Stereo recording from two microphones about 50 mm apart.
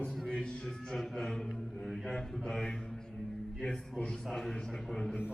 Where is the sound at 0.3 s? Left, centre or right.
Centre.